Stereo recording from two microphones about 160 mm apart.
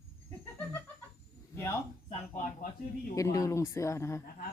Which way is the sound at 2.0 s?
55° left (ahead or behind).